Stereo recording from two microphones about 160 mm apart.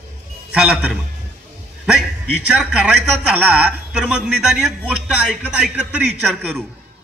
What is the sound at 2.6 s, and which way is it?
A man's voice, 5° right (ahead or behind).